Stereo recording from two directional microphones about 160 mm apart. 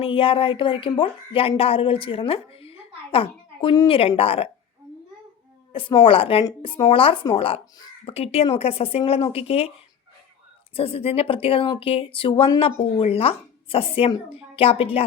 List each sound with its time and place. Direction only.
0.0 s speech: 35° left (ahead or behind)
5.7 s speech: 35° left (ahead or behind)
10.8 s speech: 35° left (ahead or behind)